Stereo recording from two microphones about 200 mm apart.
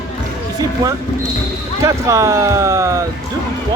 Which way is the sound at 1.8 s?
15° right (ahead or behind).